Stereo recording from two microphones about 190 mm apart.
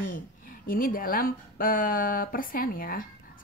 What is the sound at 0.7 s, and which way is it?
Speech, 50° left (ahead or behind).